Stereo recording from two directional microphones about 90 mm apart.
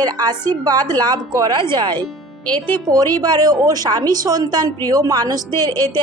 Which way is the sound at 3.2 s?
50° right (ahead or behind).